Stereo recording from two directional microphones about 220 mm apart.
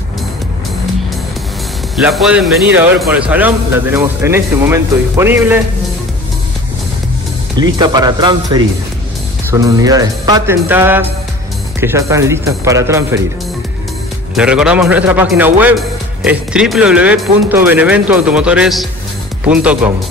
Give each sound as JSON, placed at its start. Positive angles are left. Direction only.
{"t": 2.0, "sound": "speech", "side_deg": 0}
{"t": 7.5, "sound": "speech", "side_deg": -20}
{"t": 14.3, "sound": "speech", "side_deg": -5}